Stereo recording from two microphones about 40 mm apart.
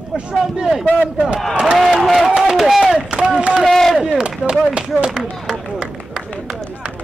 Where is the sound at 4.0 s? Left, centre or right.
Right.